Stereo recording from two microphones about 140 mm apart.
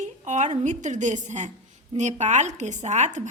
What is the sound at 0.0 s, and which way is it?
A woman's voice, 60° right (ahead or behind).